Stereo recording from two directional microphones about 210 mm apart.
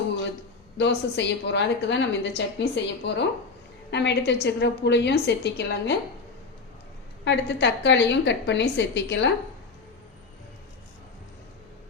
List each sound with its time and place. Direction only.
0.8 s a woman's voice: 55° left (ahead or behind)
7.3 s a woman's voice: 55° left (ahead or behind)